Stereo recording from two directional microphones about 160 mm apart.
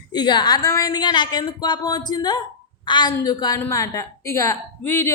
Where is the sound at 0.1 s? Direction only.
25° left (ahead or behind).